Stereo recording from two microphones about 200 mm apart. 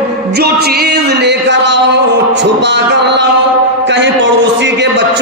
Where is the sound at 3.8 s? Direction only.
65° right (ahead or behind).